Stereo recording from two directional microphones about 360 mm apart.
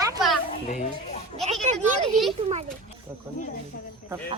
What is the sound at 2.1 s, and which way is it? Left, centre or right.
Speech, centre.